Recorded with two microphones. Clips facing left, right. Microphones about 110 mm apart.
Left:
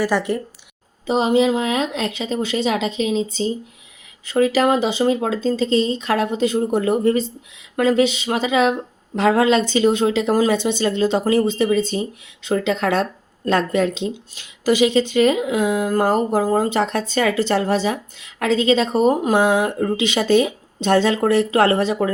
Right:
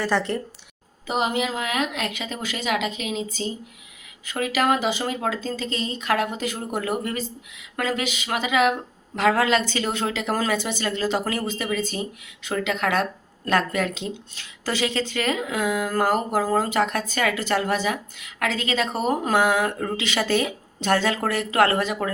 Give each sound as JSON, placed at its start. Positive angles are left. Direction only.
{"t": 0.0, "sound": "speech", "side_deg": 15}
{"t": 1.0, "sound": "speech", "side_deg": 25}